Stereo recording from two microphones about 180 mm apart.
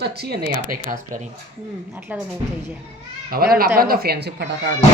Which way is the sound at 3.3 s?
55° right (ahead or behind).